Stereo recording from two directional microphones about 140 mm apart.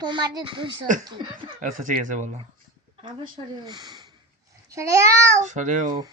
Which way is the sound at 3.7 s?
30° right (ahead or behind).